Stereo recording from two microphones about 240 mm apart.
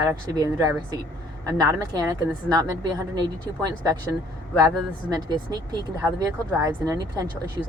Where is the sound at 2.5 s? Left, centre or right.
Centre.